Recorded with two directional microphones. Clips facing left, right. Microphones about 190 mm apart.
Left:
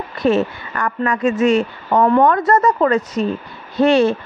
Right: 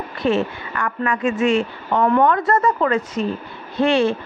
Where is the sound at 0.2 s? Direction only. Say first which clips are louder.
Left 3 dB; 40° left (ahead or behind).